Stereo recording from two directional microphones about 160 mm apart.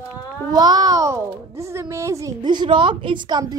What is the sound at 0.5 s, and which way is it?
A child's voice, 25° right (ahead or behind).